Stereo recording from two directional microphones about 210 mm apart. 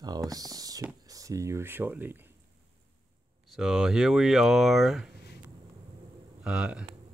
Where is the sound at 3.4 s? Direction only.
Centre (ahead or behind).